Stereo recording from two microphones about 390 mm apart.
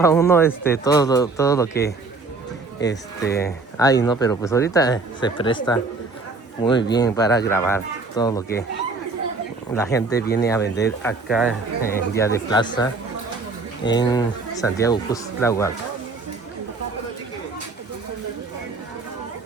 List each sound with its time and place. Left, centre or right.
0.0 s speech: centre
9.7 s speech: centre
10.2 s speech: left
10.5 s speech: centre